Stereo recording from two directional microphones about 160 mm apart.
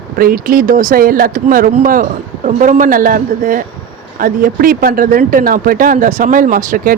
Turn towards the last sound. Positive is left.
turn(degrees=-55)  # may be behind; listen again after turning